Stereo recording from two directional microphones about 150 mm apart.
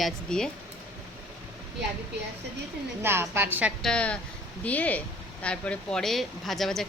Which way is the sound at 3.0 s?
15° right (ahead or behind).